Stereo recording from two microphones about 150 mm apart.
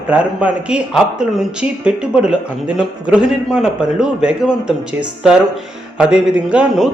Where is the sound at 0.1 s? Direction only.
10° right (ahead or behind).